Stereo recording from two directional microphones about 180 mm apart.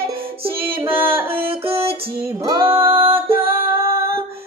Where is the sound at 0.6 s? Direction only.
10° right (ahead or behind).